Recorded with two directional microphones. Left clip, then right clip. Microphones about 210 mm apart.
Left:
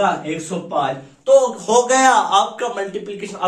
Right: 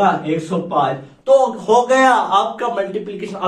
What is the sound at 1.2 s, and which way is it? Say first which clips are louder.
A man's voice: right 1 dB; 25° left (ahead or behind).